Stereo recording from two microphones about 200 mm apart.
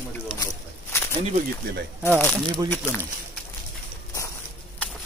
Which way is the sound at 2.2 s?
10° left (ahead or behind).